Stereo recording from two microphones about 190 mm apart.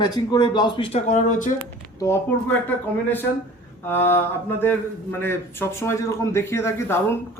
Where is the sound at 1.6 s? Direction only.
15° left (ahead or behind).